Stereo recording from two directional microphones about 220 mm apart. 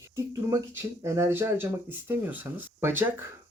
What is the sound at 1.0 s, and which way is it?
Speech, 15° right (ahead or behind).